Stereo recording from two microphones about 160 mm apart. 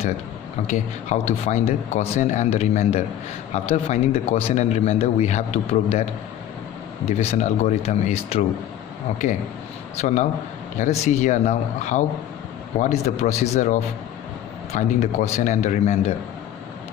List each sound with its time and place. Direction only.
0.7 s a man's voice: 45° left (ahead or behind)
7.1 s speech: 45° left (ahead or behind)